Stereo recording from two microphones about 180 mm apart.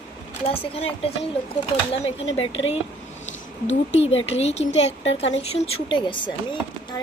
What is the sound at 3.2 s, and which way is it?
A woman's voice, 40° left (ahead or behind).